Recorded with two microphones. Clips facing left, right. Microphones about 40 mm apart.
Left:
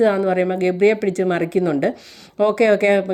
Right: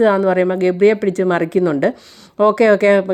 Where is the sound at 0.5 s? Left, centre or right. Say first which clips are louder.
Right 3 dB; right.